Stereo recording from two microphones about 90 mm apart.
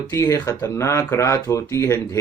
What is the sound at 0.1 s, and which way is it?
Speech, 35° left (ahead or behind).